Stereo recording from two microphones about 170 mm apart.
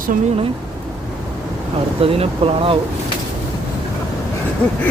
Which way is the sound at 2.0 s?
35° right (ahead or behind).